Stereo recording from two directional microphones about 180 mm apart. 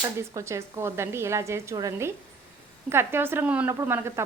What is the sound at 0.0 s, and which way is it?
A woman's voice, 15° right (ahead or behind).